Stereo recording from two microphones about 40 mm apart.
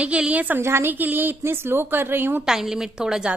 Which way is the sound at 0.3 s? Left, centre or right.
Right.